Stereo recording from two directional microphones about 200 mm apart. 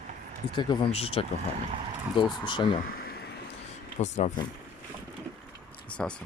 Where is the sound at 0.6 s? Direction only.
25° left (ahead or behind).